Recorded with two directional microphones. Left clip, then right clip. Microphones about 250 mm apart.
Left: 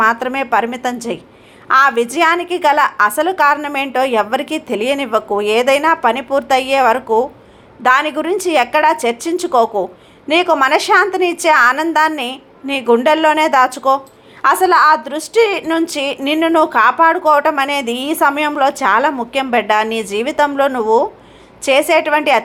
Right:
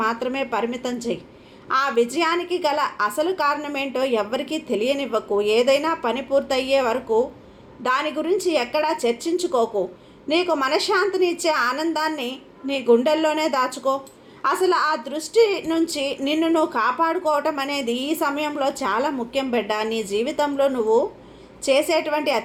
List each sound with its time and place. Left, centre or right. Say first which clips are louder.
0.0 s a woman's voice: left 9 dB; centre